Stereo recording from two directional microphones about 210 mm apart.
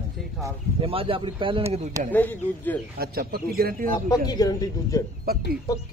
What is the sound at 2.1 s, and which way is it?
Speech, 10° left (ahead or behind).